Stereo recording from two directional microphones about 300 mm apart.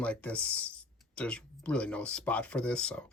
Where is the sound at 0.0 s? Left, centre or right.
Centre.